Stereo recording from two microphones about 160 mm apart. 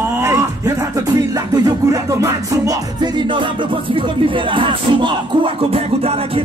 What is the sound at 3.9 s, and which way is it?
Speech, 30° right (ahead or behind).